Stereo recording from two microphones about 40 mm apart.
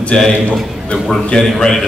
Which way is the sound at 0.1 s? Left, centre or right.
Centre.